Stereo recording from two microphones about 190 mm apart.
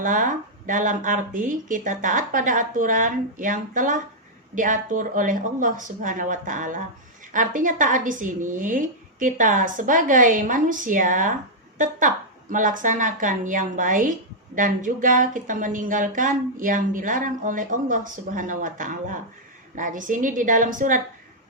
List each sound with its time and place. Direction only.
0.0 s speech: 45° right (ahead or behind)